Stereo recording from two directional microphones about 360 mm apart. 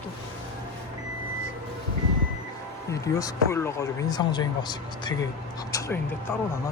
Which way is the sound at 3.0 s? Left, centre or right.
Centre.